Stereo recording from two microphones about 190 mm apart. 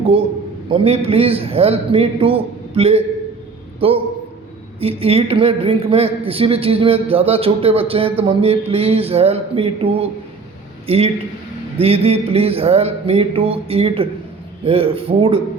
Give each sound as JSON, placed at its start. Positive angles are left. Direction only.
{"t": 0.0, "sound": "a man's voice", "side_deg": -30}